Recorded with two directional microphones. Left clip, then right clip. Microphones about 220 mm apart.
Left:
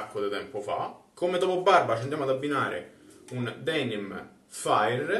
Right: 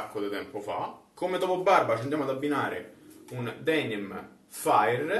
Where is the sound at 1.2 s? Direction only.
5° left (ahead or behind).